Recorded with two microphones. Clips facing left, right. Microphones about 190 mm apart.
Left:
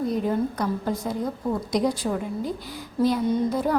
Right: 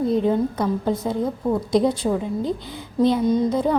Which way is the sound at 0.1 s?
25° right (ahead or behind).